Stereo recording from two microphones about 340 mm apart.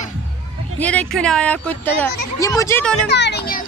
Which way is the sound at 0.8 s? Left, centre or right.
Centre.